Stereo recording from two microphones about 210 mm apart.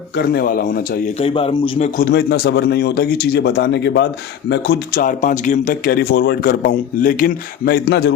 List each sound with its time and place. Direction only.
0.3 s a man's voice: 45° left (ahead or behind)
1.2 s a man's voice: 25° left (ahead or behind)
2.0 s a man's voice: 50° left (ahead or behind)
4.9 s a man's voice: 40° left (ahead or behind); by 8.1 s 55° left (ahead or behind)